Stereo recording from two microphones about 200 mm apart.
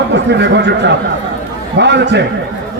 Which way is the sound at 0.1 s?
60° right (ahead or behind).